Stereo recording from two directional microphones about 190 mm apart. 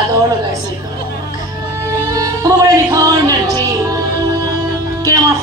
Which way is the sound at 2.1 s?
20° right (ahead or behind).